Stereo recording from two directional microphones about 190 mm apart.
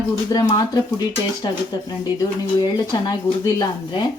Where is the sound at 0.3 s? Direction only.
20° left (ahead or behind).